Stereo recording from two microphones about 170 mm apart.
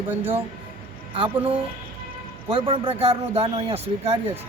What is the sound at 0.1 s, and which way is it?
Speech, 10° right (ahead or behind).